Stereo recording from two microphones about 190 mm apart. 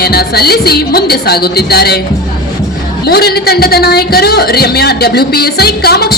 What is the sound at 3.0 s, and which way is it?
A woman's voice, 55° left (ahead or behind).